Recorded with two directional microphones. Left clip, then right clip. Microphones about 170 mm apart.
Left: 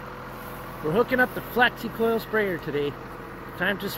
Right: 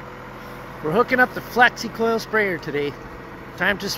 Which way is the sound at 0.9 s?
15° right (ahead or behind).